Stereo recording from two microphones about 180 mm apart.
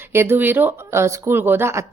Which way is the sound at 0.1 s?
15° right (ahead or behind).